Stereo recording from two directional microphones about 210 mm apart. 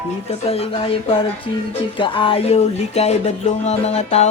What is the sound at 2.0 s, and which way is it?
Music, 25° left (ahead or behind).